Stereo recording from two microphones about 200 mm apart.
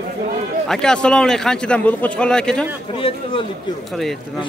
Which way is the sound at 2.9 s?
25° left (ahead or behind).